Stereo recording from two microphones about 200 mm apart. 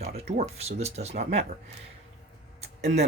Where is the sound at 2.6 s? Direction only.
35° right (ahead or behind).